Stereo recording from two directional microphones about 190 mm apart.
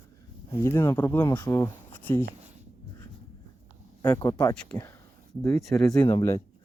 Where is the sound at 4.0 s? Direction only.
20° left (ahead or behind).